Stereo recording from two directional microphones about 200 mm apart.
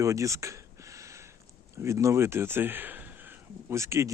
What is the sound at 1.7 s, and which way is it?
Speech, 15° right (ahead or behind).